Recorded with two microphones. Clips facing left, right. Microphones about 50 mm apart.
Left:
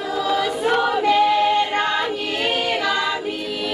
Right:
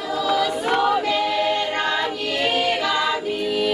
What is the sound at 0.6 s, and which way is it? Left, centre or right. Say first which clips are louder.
Choir: left 4 dB; centre.